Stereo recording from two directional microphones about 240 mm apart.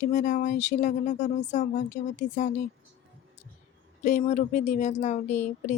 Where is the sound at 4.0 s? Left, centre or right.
Left.